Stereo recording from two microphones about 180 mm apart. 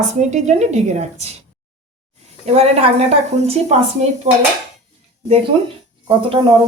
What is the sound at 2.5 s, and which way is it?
A woman's voice, 35° right (ahead or behind).